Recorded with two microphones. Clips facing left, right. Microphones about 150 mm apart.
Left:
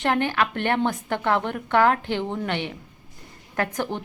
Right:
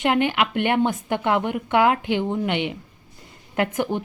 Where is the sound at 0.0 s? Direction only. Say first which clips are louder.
Right 2 dB; 15° right (ahead or behind).